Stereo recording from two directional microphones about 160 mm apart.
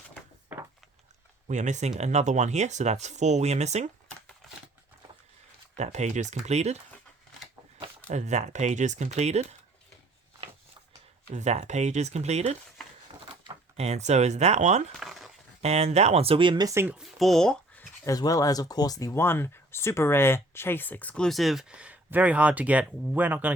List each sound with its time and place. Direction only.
0.5 s a sound: 10° right (ahead or behind)
1.5 s speech: 50° right (ahead or behind)
5.7 s speech: 45° right (ahead or behind)
8.0 s speech: 45° right (ahead or behind)
11.3 s speech: 45° right (ahead or behind)
13.7 s speech: 40° right (ahead or behind)
14.9 s crumpling: centre (ahead or behind)
15.6 s speech: 40° right (ahead or behind); by 17.0 s 15° right (ahead or behind)
17.0 s speech: centre (ahead or behind)
18.0 s speech: 20° left (ahead or behind); by 23.5 s 10° right (ahead or behind)